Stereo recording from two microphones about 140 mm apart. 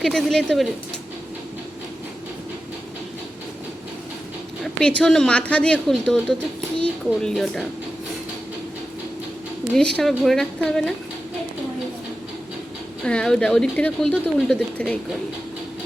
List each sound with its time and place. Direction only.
0.0 s a woman's voice: centre (ahead or behind)
4.6 s a woman's voice: 10° left (ahead or behind)
9.7 s a woman's voice: 5° left (ahead or behind)
13.1 s speech: 5° left (ahead or behind)